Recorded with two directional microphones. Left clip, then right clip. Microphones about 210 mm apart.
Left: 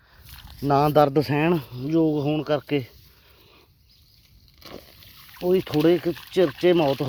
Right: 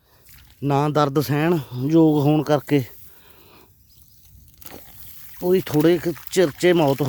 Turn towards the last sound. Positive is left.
turn(degrees=-40)  # may be behind; listen again after turning